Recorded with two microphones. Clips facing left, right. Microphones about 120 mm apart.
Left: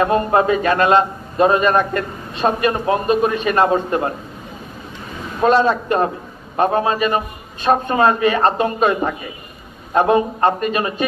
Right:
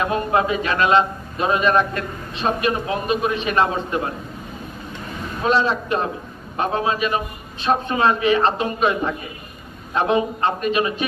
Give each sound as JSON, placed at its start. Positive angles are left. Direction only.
{"t": 0.0, "sound": "a man's voice", "side_deg": 40}
{"t": 5.4, "sound": "a man's voice", "side_deg": 45}